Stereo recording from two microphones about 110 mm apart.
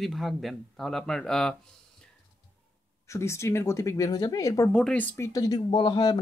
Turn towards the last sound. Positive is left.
turn(degrees=40)  # may be behind; listen again after turning